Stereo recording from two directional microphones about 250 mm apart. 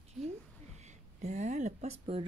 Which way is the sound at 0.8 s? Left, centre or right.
Right.